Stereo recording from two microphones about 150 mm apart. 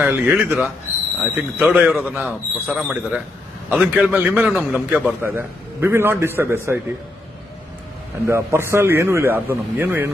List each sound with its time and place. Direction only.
0.0 s a man's voice: 10° right (ahead or behind)
8.3 s a man's voice: 20° right (ahead or behind)